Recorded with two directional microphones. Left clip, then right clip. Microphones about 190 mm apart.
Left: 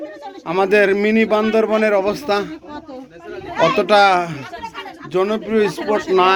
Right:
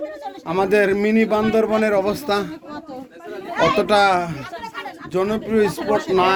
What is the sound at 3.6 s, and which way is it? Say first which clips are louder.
A man's voice: left 3 dB; 10° right (ahead or behind).